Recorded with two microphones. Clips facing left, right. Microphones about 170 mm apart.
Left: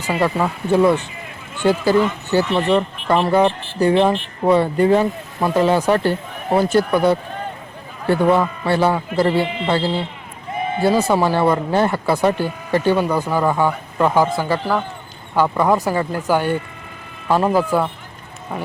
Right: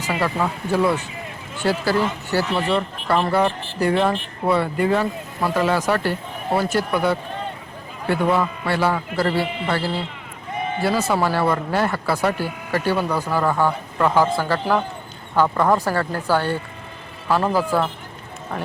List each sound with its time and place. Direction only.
0.7 s speech: 25° left (ahead or behind)
13.1 s speech: 10° left (ahead or behind)